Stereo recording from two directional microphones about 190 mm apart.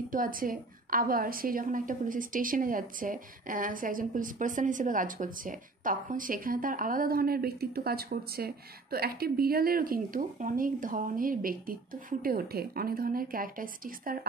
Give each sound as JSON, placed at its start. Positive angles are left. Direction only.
{"t": 0.1, "sound": "a woman's voice", "side_deg": -45}